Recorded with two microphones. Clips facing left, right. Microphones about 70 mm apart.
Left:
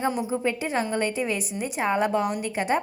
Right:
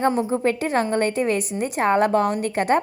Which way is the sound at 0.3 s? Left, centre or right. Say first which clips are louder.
Right 5 dB; right.